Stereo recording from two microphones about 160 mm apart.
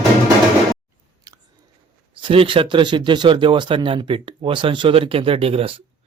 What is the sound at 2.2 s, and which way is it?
Speech, 35° right (ahead or behind).